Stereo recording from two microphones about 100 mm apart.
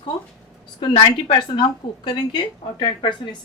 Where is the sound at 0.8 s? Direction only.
60° left (ahead or behind).